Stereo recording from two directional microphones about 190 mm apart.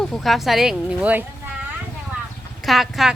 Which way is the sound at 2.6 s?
Centre (ahead or behind).